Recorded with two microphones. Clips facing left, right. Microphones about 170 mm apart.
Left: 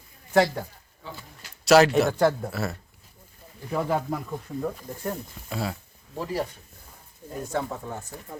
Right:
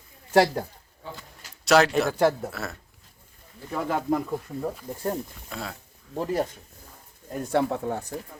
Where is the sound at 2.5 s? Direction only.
Centre (ahead or behind).